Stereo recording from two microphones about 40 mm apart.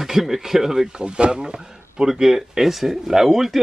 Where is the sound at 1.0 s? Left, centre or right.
Right.